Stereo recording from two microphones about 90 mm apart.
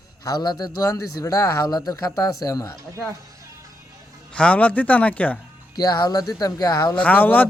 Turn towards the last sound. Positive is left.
turn(degrees=20)  # may be behind; listen again after turning